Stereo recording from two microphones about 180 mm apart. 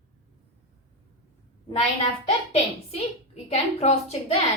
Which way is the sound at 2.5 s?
35° left (ahead or behind).